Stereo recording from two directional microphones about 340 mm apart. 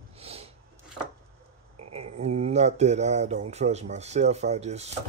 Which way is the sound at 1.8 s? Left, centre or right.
Centre.